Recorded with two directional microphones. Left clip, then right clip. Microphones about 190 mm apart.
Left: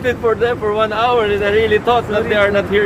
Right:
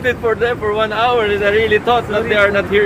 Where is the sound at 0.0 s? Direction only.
15° left (ahead or behind).